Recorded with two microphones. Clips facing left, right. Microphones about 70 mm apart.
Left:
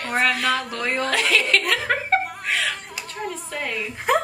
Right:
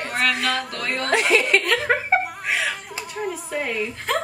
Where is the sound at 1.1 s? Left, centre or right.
Right.